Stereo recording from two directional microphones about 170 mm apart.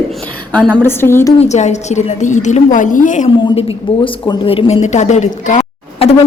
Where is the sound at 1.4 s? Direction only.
40° left (ahead or behind).